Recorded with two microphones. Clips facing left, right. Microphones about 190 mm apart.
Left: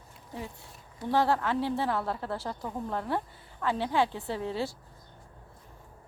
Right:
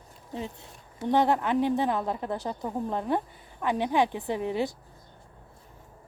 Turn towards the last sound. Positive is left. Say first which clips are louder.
# right 4 dB
turn(degrees=-15)  # may be behind; listen again after turning